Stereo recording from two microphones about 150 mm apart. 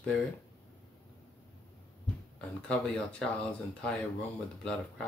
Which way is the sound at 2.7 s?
5° left (ahead or behind).